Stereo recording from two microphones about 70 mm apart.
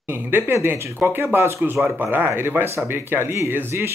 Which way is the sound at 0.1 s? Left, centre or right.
Right.